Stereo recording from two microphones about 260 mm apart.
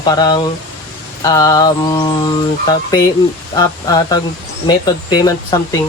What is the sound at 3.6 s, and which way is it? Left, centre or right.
Speech, centre.